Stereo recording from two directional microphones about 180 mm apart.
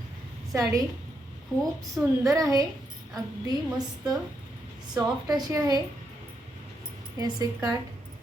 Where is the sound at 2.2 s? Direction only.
20° right (ahead or behind).